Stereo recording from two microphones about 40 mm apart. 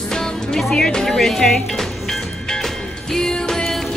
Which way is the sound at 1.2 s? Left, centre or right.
Centre.